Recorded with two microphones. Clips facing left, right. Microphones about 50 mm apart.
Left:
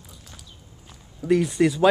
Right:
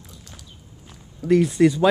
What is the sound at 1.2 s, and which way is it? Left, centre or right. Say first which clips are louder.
Speech: right 3 dB; centre.